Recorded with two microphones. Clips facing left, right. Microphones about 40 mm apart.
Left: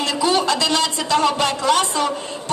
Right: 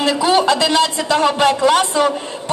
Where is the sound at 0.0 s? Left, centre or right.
Centre.